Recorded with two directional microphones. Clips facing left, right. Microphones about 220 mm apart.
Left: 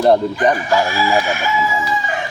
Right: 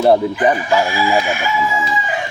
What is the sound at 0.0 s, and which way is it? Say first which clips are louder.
Speech: right 1 dB; 5° right (ahead or behind).